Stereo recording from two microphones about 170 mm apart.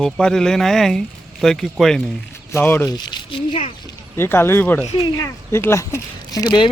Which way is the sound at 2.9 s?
25° left (ahead or behind).